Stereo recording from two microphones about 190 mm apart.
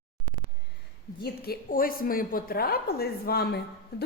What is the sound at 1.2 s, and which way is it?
A woman's voice, 55° left (ahead or behind).